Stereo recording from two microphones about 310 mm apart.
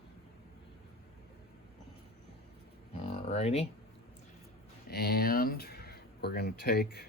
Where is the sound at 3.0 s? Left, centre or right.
Centre.